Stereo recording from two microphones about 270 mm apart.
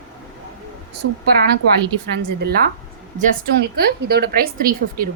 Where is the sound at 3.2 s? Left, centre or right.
Right.